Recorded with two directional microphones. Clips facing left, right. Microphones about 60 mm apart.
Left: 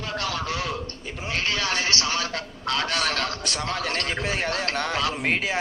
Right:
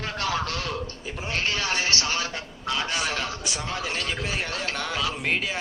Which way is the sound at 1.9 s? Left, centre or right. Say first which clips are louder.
Left 1 dB; right.